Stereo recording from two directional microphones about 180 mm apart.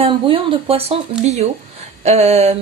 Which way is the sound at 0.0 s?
30° right (ahead or behind).